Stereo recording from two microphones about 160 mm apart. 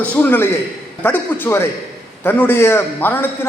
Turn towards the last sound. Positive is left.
turn(degrees=15)  # may be behind; listen again after turning